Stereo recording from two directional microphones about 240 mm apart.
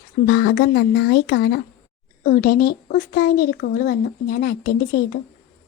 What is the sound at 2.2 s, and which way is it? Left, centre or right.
Child singing, left.